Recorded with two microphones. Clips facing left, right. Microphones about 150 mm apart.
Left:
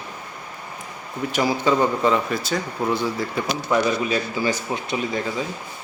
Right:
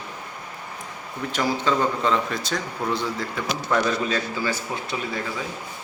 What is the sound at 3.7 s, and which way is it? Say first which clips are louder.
Speech: left 2 dB; 15° left (ahead or behind).